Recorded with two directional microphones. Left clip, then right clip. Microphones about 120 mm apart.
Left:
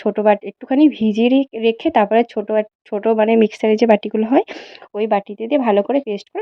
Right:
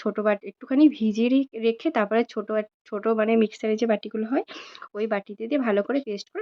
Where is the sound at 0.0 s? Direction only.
30° left (ahead or behind).